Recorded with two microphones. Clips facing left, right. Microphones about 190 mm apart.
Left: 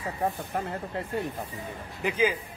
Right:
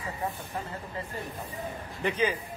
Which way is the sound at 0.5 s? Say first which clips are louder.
Left 5 dB; 65° left (ahead or behind).